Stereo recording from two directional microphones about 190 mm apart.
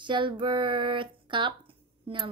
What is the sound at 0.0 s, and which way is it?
Speech, 25° right (ahead or behind).